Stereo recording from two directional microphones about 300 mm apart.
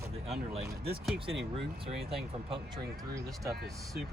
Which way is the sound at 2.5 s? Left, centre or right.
Centre.